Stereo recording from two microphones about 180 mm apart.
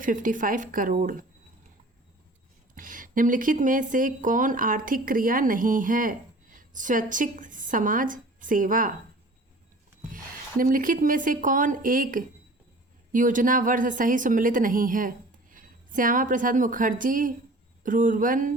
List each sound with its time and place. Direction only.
0.0 s speech: 45° right (ahead or behind)
2.7 s speech: 50° right (ahead or behind)
10.6 s speech: 50° right (ahead or behind)